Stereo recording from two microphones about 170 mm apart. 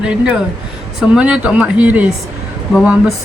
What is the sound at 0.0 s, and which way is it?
Speech, 5° right (ahead or behind).